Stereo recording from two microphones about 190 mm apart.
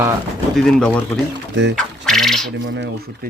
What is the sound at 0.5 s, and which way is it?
Speech, centre (ahead or behind).